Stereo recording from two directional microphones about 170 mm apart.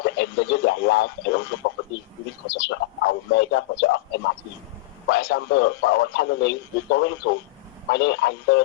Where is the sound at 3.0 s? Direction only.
90° left.